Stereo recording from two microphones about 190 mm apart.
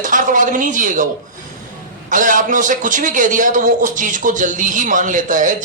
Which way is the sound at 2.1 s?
45° right (ahead or behind).